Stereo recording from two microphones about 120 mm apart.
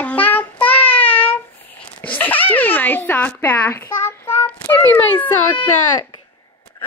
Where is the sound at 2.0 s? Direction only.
15° left (ahead or behind).